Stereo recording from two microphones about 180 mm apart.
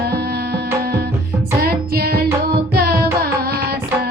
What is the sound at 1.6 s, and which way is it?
Music, 60° right (ahead or behind).